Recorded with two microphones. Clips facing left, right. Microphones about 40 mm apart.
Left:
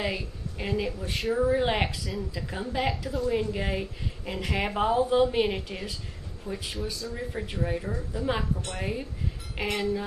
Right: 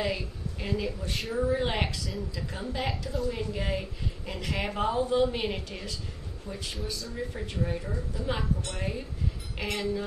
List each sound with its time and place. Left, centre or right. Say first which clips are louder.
0.0 s a woman's voice: even; centre
1.1 s a woman's voice: left 7 dB; centre
1.5 s a woman's voice: left 3 dB; centre
3.3 s a woman's voice: left 6 dB; centre
6.7 s a woman's voice: left 2 dB; centre
7.2 s a woman's voice: even; centre